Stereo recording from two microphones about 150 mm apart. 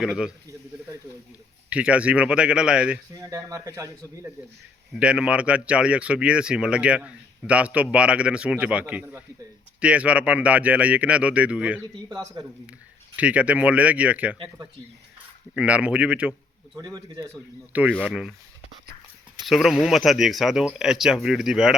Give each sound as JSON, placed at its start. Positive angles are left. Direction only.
{"t": 0.0, "sound": "speech", "side_deg": -5}
{"t": 1.7, "sound": "speech", "side_deg": -10}
{"t": 3.2, "sound": "speech", "side_deg": -20}
{"t": 4.9, "sound": "speech", "side_deg": -5}
{"t": 12.0, "sound": "speech", "side_deg": -25}
{"t": 13.1, "sound": "speech", "side_deg": -10}
{"t": 15.5, "sound": "speech", "side_deg": -10}
{"t": 16.7, "sound": "speech", "side_deg": -25}
{"t": 17.7, "sound": "speech", "side_deg": -10}
{"t": 17.9, "sound": "speech", "side_deg": 0}
{"t": 19.5, "sound": "speech", "side_deg": 0}